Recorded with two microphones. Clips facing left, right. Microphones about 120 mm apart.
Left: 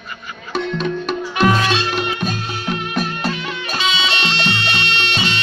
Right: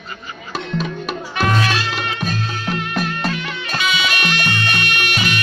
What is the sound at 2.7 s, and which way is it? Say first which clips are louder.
Music: left 1 dB; 5° left (ahead or behind).